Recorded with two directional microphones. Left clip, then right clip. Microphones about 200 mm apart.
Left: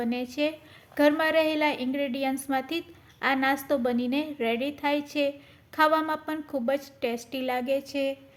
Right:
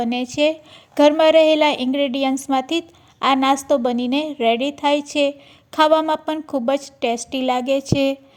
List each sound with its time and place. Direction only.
0.0 s a woman's voice: 35° right (ahead or behind)